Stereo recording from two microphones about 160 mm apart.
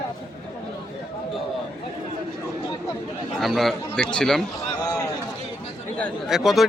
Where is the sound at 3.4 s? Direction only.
Centre (ahead or behind).